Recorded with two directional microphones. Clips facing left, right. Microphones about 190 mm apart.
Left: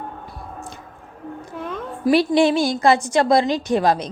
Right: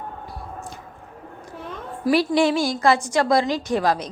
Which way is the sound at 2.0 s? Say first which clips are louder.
Left 3 dB; 25° left (ahead or behind).